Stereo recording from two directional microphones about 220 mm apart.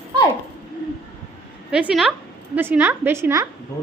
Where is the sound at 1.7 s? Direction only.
5° right (ahead or behind).